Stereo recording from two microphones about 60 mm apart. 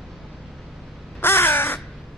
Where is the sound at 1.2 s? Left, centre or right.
Left.